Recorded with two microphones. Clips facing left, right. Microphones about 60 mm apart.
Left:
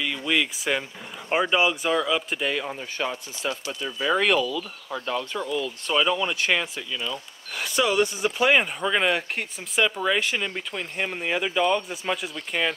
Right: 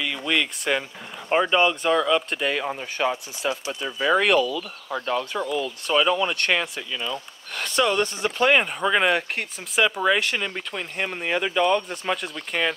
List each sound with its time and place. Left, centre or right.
0.0 s speech: centre
2.6 s speech: right
4.3 s speech: centre
4.9 s speech: right
5.3 s speech: centre
5.9 s speech: centre
8.8 s speech: centre
9.1 s speech: centre